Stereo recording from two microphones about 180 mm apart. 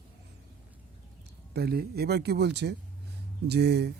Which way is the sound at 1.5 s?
60° right (ahead or behind).